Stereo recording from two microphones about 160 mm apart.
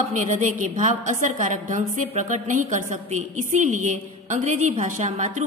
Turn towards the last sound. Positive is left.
turn(degrees=-50)  # may be behind; listen again after turning